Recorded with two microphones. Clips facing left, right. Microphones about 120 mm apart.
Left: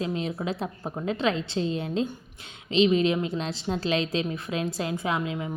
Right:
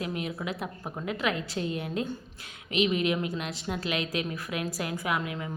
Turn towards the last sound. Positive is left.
turn(degrees=25)  # may be behind; listen again after turning